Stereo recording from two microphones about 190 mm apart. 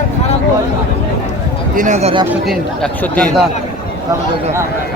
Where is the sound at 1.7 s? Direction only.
40° right (ahead or behind).